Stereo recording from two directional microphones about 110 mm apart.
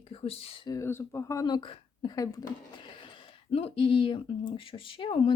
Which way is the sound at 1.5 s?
50° left (ahead or behind).